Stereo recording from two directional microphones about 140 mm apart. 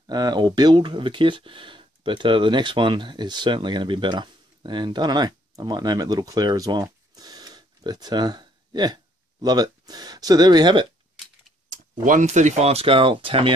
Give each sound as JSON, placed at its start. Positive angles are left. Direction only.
{"t": 0.0, "sound": "speech", "side_deg": -30}
{"t": 11.7, "sound": "speech", "side_deg": -70}